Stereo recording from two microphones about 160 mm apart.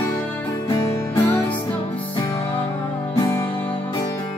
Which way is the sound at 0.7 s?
20° left (ahead or behind).